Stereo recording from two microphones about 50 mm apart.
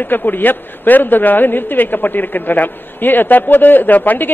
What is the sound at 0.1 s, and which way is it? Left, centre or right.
A man's voice, left.